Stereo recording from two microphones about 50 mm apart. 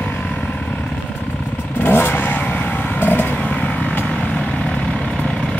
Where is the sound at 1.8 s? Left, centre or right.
Left.